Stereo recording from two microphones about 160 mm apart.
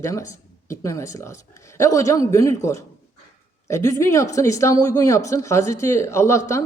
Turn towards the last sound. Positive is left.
turn(degrees=20)  # may be behind; listen again after turning